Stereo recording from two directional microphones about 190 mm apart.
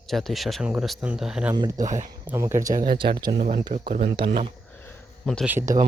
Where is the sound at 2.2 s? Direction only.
15° right (ahead or behind).